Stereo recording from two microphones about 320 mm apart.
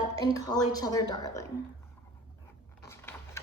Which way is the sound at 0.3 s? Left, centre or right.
Centre.